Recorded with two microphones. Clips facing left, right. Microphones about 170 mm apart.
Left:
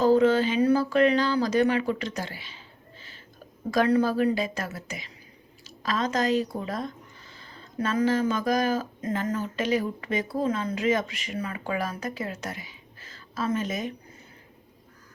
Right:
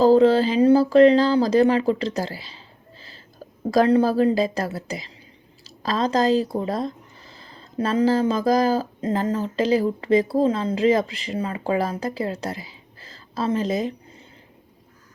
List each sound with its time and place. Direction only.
0.0 s a woman's voice: 35° right (ahead or behind)